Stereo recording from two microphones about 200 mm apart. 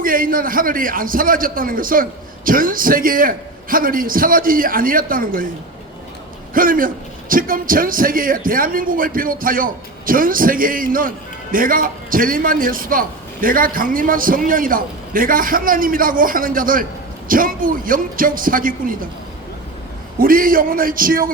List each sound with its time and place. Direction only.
0.0 s a man's voice: 45° right (ahead or behind)
6.5 s a man's voice: 45° right (ahead or behind)
20.1 s a man's voice: 45° right (ahead or behind)